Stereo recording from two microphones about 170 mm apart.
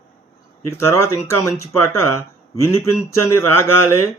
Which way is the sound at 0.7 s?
15° left (ahead or behind).